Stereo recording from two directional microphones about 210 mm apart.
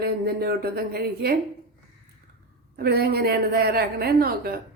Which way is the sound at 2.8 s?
50° right (ahead or behind).